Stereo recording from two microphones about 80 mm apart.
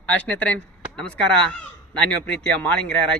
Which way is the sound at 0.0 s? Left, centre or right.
Centre.